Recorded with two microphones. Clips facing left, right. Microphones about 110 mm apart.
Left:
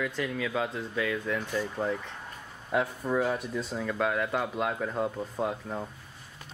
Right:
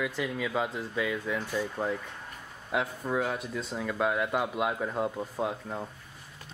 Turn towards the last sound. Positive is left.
turn(degrees=0)  # may be behind; listen again after turning